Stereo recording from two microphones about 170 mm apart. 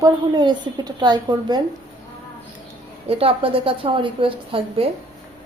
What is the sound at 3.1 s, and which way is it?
A woman's voice, 35° right (ahead or behind).